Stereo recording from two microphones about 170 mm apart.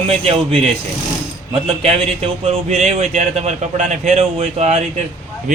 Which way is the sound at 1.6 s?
35° right (ahead or behind).